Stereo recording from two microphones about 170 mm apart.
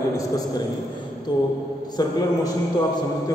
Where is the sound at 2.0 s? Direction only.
25° left (ahead or behind).